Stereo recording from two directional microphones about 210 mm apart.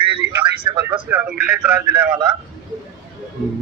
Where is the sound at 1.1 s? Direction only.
10° right (ahead or behind).